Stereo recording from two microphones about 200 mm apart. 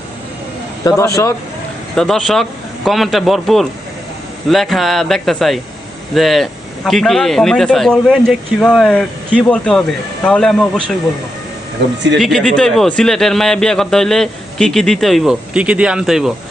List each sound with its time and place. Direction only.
0.9 s speech: 15° left (ahead or behind)
2.0 s a man's voice: 5° left (ahead or behind)
12.2 s a man's voice: centre (ahead or behind)